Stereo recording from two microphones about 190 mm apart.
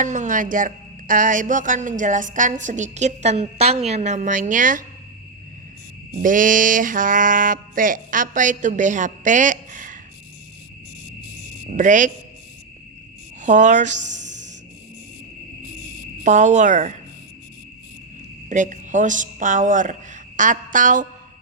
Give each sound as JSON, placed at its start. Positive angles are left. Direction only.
{"t": 0.0, "sound": "speech", "side_deg": -40}
{"t": 6.1, "sound": "speech", "side_deg": -45}
{"t": 11.7, "sound": "speech", "side_deg": -40}
{"t": 13.4, "sound": "speech", "side_deg": -40}
{"t": 14.2, "sound": "music", "side_deg": -40}
{"t": 16.2, "sound": "speech", "side_deg": -40}
{"t": 18.4, "sound": "speech", "side_deg": -40}